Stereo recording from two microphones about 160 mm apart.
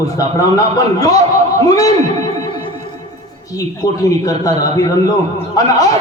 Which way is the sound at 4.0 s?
20° left (ahead or behind).